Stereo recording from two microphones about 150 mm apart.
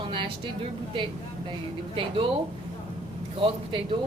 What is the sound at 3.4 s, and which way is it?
Speech, 35° right (ahead or behind).